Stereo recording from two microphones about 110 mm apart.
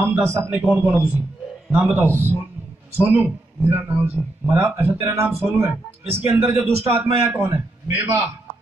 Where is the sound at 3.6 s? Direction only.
20° right (ahead or behind).